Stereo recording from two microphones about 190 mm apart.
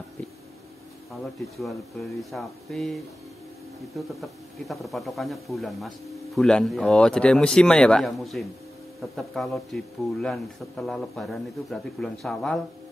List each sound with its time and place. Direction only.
1.1 s speech: centre (ahead or behind)
4.2 s speech: centre (ahead or behind)